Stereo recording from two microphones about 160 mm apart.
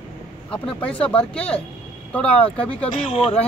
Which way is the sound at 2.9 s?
45° left (ahead or behind).